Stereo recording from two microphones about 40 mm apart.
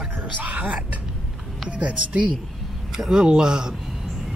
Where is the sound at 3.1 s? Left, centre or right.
Centre.